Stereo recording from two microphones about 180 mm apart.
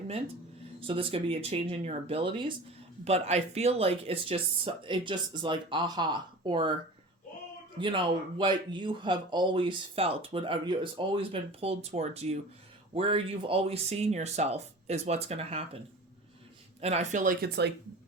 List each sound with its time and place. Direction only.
0.8 s speech: 30° right (ahead or behind)
7.8 s speech: 25° right (ahead or behind)
16.8 s speech: 35° right (ahead or behind)
17.4 s speech: 65° right (ahead or behind)